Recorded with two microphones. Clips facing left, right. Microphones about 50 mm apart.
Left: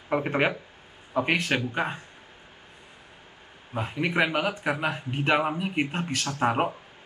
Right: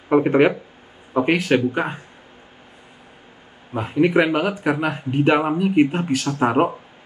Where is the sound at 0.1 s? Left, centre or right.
Centre.